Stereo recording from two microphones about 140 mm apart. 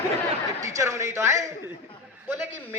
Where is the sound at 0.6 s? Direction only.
20° right (ahead or behind).